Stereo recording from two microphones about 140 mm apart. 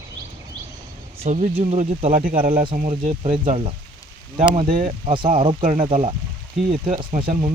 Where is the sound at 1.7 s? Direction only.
50° right (ahead or behind).